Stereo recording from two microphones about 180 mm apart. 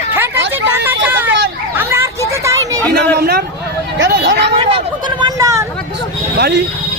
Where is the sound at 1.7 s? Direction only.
15° right (ahead or behind).